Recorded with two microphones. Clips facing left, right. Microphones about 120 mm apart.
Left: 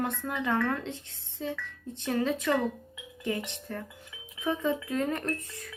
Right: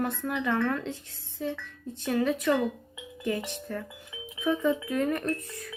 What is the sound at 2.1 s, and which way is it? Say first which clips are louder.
Speech: right 2 dB; 20° left (ahead or behind).